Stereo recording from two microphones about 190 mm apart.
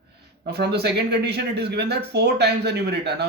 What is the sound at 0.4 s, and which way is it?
Speech, 60° right (ahead or behind).